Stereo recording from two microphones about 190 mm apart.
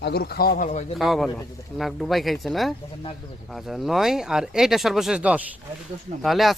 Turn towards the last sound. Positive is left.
turn(degrees=0)  # may be behind; listen again after turning